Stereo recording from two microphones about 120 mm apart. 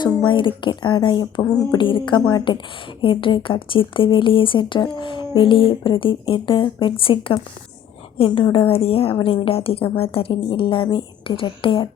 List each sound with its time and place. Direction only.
0.3 s speech: 45° left (ahead or behind)